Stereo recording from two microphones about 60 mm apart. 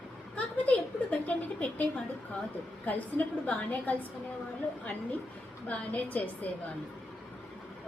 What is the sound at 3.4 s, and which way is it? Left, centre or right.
Speech, left.